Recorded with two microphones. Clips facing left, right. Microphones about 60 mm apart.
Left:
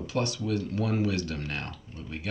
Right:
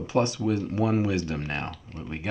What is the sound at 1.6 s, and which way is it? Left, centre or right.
Speech, right.